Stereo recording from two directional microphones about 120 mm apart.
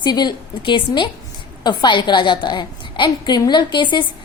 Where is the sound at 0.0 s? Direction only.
40° left (ahead or behind).